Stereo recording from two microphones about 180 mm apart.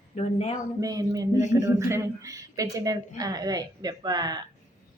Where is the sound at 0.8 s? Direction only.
20° right (ahead or behind).